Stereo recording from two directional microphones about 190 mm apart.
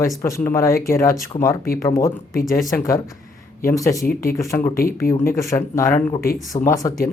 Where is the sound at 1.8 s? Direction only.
15° left (ahead or behind).